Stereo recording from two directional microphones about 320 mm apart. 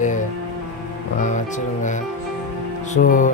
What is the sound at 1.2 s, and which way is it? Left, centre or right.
Speech, left.